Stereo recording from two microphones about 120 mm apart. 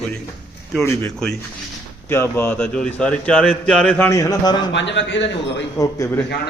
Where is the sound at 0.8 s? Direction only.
20° left (ahead or behind).